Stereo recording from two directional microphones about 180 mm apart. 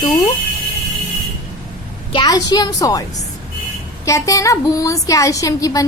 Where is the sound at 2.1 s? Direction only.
20° left (ahead or behind).